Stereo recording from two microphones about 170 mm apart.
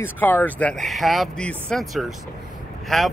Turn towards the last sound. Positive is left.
turn(degrees=0)  # may be behind; listen again after turning